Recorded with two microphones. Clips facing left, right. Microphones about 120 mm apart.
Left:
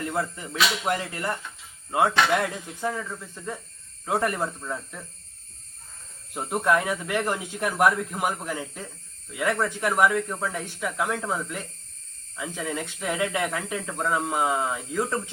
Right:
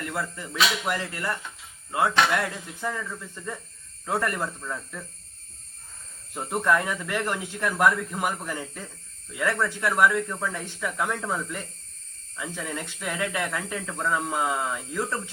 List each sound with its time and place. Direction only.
0.0 s speech: 25° left (ahead or behind); by 3.6 s 5° left (ahead or behind)
4.0 s speech: 15° left (ahead or behind)
6.3 s speech: 10° left (ahead or behind)
12.4 s speech: 15° left (ahead or behind)